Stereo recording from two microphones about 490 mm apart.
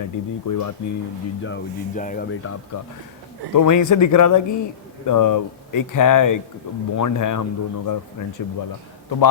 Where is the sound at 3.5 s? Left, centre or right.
Left.